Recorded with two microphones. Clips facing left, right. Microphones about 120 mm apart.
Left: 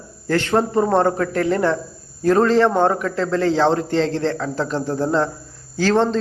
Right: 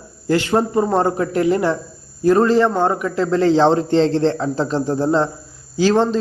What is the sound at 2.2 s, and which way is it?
A man's voice, 5° right (ahead or behind).